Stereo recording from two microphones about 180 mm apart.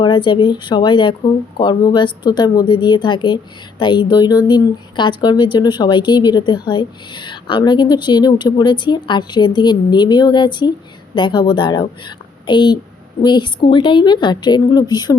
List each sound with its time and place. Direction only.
0.0 s speech: 25° left (ahead or behind)